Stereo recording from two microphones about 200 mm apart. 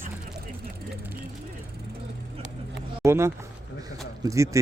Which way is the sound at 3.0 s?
15° right (ahead or behind).